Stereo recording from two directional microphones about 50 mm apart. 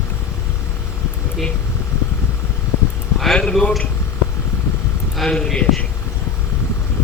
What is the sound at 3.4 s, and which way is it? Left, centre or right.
Speech, centre.